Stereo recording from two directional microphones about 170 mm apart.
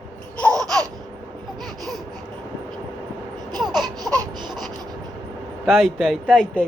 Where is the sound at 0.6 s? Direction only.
Centre (ahead or behind).